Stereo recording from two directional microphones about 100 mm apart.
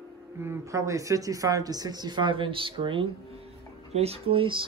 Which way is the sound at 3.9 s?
85° right.